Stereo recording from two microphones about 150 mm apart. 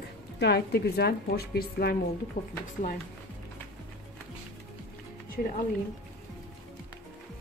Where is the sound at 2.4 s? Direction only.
80° left.